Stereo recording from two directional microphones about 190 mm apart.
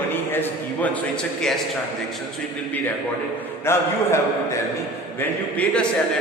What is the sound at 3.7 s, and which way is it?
Speech, 15° left (ahead or behind).